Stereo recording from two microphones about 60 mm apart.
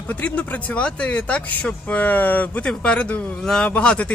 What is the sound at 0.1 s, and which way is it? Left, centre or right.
Speech, left.